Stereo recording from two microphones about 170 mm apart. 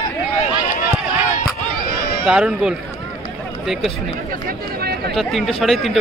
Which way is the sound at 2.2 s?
5° right (ahead or behind).